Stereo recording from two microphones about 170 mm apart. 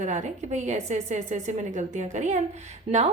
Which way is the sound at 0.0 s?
45° right (ahead or behind).